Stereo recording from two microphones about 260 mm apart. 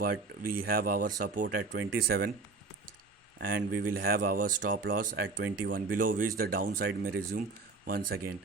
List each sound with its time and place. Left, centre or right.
0.0 s speech: right
3.7 s speech: right